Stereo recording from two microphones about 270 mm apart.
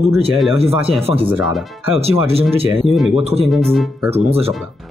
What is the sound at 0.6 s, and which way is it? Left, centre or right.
Speech, right.